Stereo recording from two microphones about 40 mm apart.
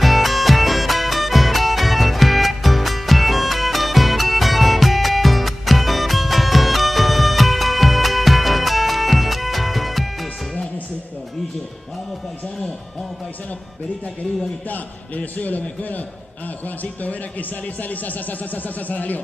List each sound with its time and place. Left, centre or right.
0.0 s music: centre
14.7 s speech: left
17.0 s speech: left